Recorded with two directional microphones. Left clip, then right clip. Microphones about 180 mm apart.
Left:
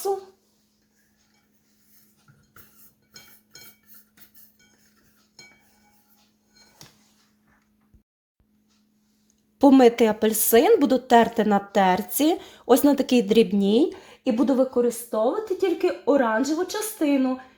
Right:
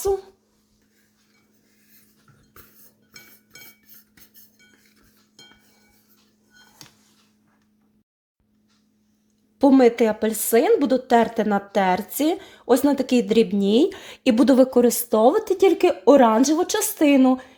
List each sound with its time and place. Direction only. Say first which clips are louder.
9.6 s a woman's voice: even; 5° left (ahead or behind)
14.0 s a woman's voice: right 5 dB; 30° right (ahead or behind); by 17.4 s 60° right (ahead or behind)